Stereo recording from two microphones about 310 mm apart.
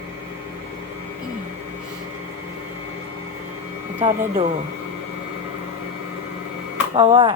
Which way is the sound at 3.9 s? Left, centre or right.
Centre.